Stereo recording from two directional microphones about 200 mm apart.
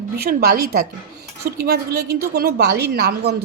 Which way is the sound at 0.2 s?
50° right (ahead or behind).